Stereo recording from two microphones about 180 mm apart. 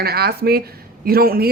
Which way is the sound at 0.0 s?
60° right (ahead or behind).